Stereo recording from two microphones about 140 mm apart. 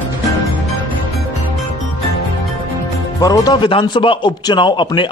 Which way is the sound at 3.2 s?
25° left (ahead or behind).